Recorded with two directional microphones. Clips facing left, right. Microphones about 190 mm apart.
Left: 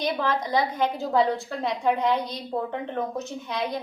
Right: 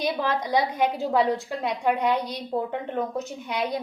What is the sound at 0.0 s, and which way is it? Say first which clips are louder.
A woman's voice: even; 15° right (ahead or behind).